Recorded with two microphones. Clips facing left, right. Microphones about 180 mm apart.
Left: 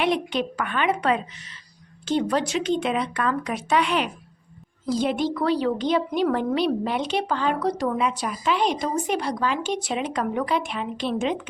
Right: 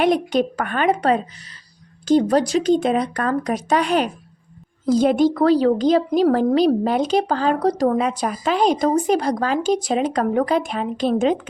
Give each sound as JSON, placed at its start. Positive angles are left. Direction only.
{"t": 0.0, "sound": "a woman's voice", "side_deg": -45}